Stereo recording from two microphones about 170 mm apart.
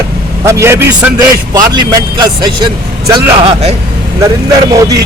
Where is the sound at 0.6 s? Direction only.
15° right (ahead or behind).